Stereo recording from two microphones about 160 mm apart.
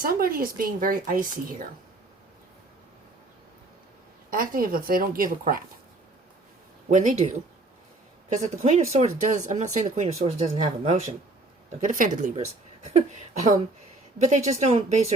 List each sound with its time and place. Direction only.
0.0 s speech: 65° right (ahead or behind)
4.3 s speech: 65° right (ahead or behind)
6.9 s speech: 50° right (ahead or behind)
11.8 s speech: 55° right (ahead or behind)
12.8 s speech: 45° right (ahead or behind)